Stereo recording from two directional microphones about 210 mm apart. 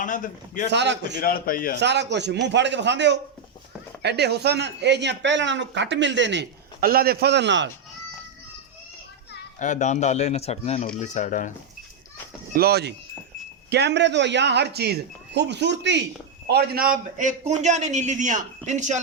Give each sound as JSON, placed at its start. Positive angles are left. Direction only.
{"t": 0.0, "sound": "speech", "side_deg": 40}
{"t": 0.7, "sound": "speech", "side_deg": -55}
{"t": 1.1, "sound": "a man's voice", "side_deg": 45}
{"t": 1.8, "sound": "speech", "side_deg": -55}
{"t": 9.6, "sound": "speech", "side_deg": 35}
{"t": 12.5, "sound": "a man's voice", "side_deg": -50}